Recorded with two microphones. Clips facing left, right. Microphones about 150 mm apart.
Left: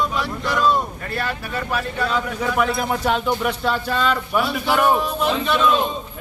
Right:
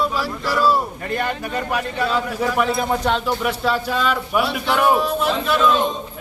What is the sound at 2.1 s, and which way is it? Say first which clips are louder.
Speech: right 2 dB; centre (ahead or behind).